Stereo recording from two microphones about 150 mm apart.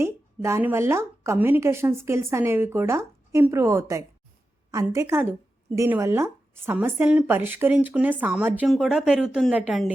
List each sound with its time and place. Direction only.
0.0 s a woman's voice: 20° right (ahead or behind)